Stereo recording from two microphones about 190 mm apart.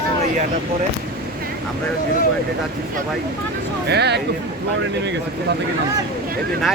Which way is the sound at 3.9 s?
60° right (ahead or behind).